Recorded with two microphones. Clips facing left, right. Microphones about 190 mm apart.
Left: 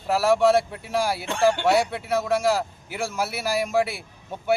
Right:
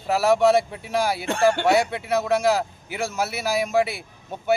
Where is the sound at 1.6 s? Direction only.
5° left (ahead or behind).